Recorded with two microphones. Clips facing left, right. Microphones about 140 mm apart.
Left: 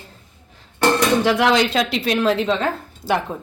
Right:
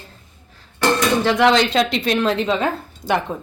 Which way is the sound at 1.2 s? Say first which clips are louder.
Right 1 dB; 10° left (ahead or behind).